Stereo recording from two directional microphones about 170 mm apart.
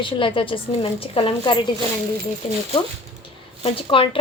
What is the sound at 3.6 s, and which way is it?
Speech, 30° left (ahead or behind).